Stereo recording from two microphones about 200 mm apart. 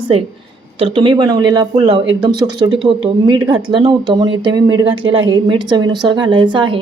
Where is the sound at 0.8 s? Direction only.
25° right (ahead or behind).